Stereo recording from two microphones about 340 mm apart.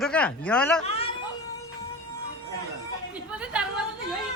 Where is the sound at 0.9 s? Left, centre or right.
Centre.